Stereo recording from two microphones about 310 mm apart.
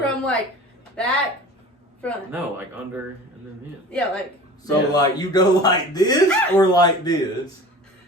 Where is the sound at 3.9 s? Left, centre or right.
Centre.